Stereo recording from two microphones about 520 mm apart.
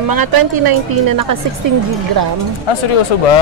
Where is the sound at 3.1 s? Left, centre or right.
Left.